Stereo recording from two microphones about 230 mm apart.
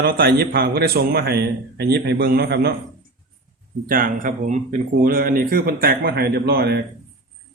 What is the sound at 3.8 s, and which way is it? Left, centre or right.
Speech, right.